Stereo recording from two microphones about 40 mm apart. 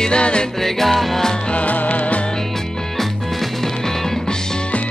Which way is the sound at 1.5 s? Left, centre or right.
Left.